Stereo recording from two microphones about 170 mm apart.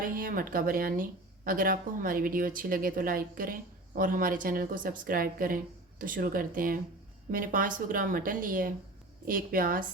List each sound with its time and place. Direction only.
0.0 s a woman's voice: 55° right (ahead or behind)